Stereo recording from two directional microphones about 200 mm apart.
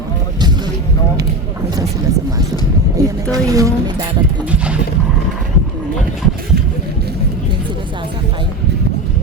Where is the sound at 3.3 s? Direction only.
15° right (ahead or behind).